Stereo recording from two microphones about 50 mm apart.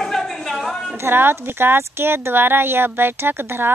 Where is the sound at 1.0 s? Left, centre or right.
Right.